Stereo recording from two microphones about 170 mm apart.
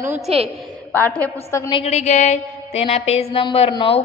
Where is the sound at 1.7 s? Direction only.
40° left (ahead or behind).